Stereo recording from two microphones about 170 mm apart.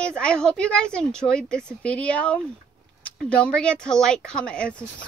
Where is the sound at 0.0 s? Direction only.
5° left (ahead or behind).